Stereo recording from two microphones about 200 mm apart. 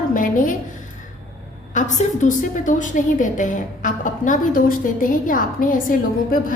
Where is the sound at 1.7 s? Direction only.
40° left (ahead or behind).